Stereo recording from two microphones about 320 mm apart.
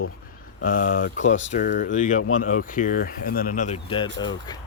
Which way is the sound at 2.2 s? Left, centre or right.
Left.